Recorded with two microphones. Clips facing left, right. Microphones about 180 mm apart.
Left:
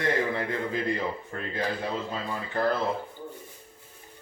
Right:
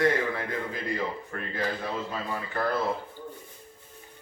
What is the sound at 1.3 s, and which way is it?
Speech, 25° left (ahead or behind).